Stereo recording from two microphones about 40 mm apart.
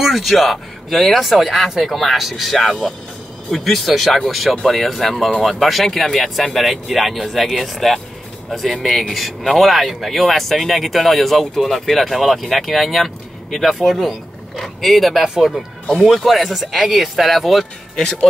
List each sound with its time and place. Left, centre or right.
0.0 s speech: centre
15.2 s speech: centre
16.3 s speech: centre